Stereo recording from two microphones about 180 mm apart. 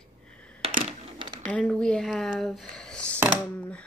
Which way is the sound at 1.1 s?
25° right (ahead or behind).